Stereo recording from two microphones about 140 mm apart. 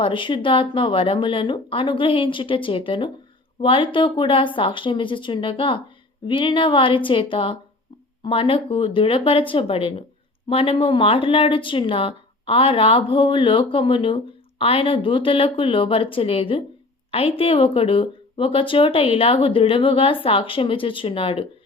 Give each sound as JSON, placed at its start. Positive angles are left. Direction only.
{"t": 0.0, "sound": "a woman's voice", "side_deg": 35}